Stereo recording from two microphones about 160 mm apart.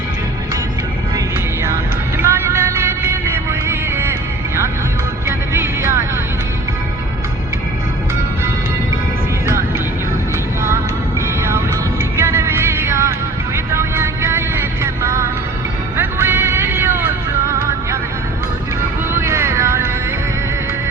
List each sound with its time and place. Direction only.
2.1 s music: 15° right (ahead or behind)
12.1 s music: 15° right (ahead or behind)
19.2 s vehicle: 15° right (ahead or behind)